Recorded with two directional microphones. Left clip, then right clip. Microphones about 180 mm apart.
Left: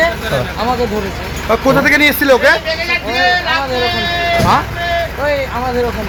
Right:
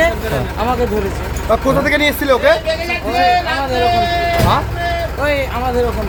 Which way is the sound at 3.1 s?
90° right.